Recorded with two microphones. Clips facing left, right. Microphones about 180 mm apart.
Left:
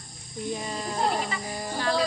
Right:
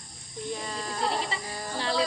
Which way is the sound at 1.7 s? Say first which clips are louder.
Left 2 dB; 25° right (ahead or behind).